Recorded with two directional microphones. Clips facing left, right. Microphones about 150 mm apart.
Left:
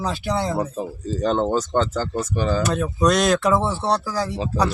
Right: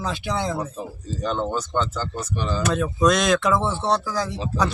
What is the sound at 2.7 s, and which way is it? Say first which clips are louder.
Speech: right 4 dB; 10° left (ahead or behind).